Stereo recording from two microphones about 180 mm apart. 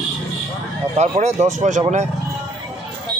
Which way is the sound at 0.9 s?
40° right (ahead or behind).